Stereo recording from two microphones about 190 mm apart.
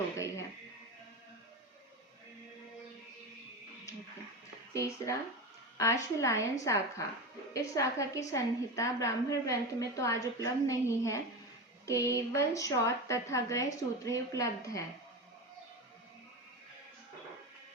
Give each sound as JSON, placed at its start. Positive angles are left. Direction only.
{"t": 4.7, "sound": "a woman's voice", "side_deg": 15}